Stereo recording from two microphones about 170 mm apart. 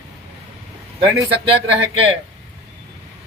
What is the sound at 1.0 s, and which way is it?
Speech, 30° right (ahead or behind).